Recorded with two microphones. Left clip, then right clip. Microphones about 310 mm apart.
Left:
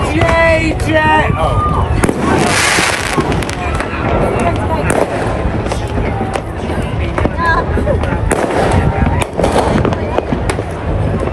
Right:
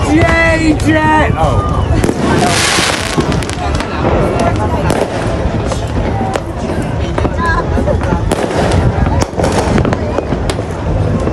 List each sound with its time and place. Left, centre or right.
0.3 s music: right
2.0 s fireworks: centre